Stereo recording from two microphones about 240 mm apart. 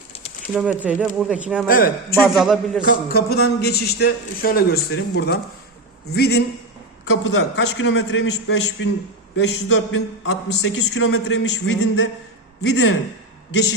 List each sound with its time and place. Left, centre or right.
0.5 s speech: centre
1.6 s a man's voice: left
2.1 s speech: centre
2.9 s a man's voice: left